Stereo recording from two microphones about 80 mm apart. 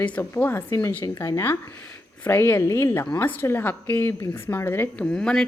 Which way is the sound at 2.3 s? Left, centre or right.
Left.